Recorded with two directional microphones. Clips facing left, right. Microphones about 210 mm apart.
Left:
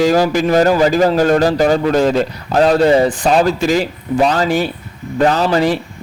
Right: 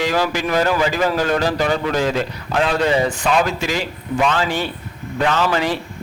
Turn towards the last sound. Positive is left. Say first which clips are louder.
# left 5 dB
turn(degrees=35)  # may be behind; listen again after turning